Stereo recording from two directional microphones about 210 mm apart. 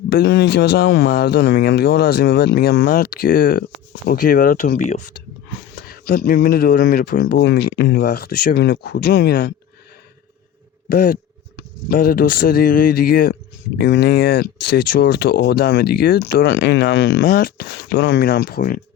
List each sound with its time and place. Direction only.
0.1 s speech: 55° left (ahead or behind); by 5.0 s 35° left (ahead or behind)
5.9 s speech: 45° left (ahead or behind)
10.8 s speech: 45° left (ahead or behind)